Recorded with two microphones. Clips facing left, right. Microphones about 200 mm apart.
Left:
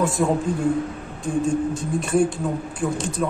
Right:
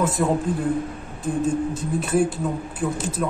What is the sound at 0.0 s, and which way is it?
A man's voice, centre (ahead or behind).